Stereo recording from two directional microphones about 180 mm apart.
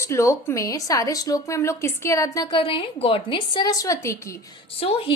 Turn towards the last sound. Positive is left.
turn(degrees=30)  # may be behind; listen again after turning